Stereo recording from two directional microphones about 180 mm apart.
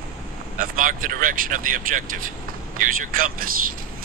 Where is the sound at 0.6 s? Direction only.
50° right (ahead or behind).